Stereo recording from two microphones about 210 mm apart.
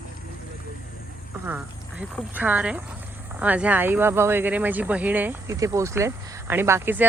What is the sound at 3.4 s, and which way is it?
Speech, 5° right (ahead or behind).